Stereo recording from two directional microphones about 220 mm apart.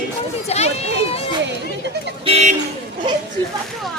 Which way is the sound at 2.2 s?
30° right (ahead or behind).